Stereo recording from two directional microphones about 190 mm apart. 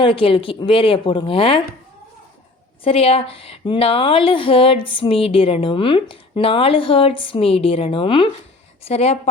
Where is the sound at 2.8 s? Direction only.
30° left (ahead or behind).